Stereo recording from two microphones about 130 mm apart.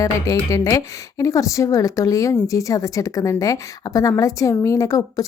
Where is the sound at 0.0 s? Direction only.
25° left (ahead or behind).